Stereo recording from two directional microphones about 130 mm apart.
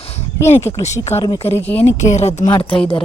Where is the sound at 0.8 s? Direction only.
60° left (ahead or behind).